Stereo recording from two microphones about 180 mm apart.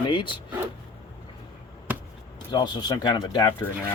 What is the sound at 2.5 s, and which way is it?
Speech, 25° left (ahead or behind).